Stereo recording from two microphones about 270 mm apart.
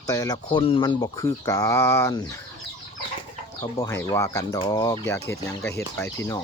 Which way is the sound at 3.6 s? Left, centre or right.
Centre.